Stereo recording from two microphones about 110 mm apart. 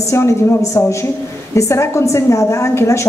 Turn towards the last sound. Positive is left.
turn(degrees=25)  # may be behind; listen again after turning